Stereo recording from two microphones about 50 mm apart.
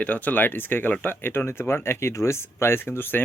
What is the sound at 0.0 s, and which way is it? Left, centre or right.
Speech, left.